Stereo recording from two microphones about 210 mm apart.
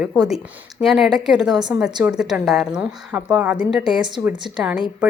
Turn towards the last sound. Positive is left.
turn(degrees=-5)  # may be behind; listen again after turning